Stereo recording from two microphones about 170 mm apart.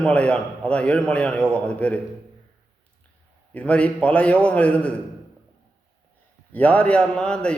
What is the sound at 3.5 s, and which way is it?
A man's voice, 5° left (ahead or behind).